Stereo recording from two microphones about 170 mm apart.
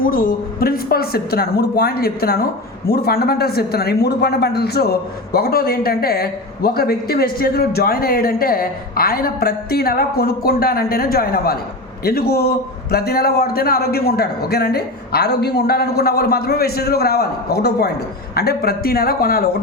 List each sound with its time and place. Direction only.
0.0 s a woman's voice: 55° left (ahead or behind)